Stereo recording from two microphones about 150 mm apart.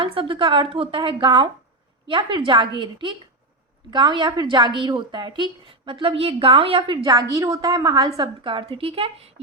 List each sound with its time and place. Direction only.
0.0 s a woman's voice: 35° right (ahead or behind)